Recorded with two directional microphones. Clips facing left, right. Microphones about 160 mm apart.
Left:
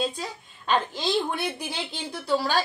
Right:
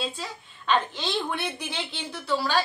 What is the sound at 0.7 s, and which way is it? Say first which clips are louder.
A child's voice: left 1 dB; 40° left (ahead or behind).